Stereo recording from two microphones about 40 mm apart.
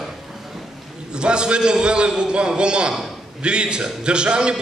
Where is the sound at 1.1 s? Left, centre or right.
Right.